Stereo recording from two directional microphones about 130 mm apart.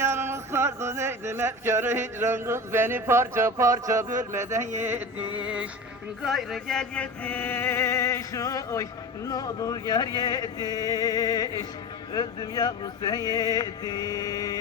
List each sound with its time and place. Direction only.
0.0 s a sound: 20° right (ahead or behind)
4.4 s speech: 20° right (ahead or behind)
4.8 s music: 15° right (ahead or behind); by 14.6 s 30° left (ahead or behind)